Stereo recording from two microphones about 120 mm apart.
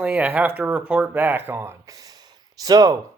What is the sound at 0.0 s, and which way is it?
Speech, 15° right (ahead or behind).